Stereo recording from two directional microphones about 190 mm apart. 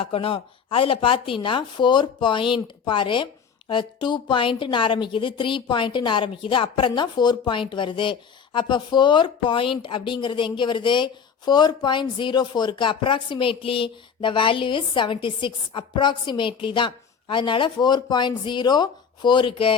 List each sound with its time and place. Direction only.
0.0 s a woman's voice: 30° left (ahead or behind)